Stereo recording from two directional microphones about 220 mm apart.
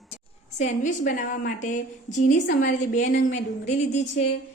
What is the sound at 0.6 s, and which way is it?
A woman's voice, 35° left (ahead or behind).